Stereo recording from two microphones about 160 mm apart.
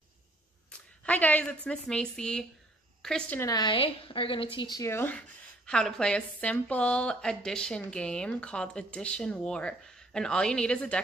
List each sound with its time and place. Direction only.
0.7 s a woman's voice: 10° left (ahead or behind)
3.3 s a woman's voice: 25° left (ahead or behind); by 11.0 s 5° left (ahead or behind)